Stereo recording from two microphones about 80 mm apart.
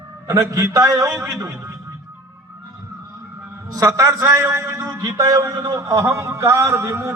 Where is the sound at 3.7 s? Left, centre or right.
Right.